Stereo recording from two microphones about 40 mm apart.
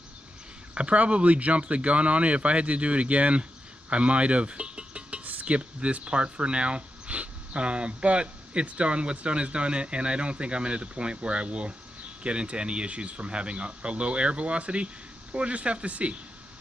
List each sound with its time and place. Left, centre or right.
0.7 s speech: right
3.9 s music: right
5.2 s speech: right